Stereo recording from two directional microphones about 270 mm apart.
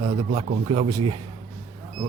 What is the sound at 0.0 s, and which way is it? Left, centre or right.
Speech, right.